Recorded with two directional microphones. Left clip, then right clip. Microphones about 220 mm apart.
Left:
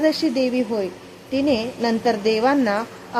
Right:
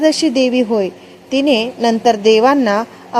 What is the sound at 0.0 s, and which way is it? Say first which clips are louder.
A woman's voice: right 6 dB; 15° right (ahead or behind).